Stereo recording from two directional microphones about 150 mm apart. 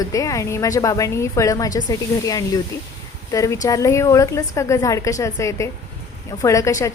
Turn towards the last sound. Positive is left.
turn(degrees=20)  # may be behind; listen again after turning